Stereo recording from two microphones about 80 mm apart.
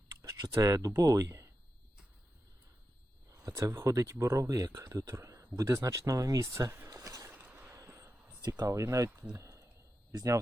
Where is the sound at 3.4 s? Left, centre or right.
Right.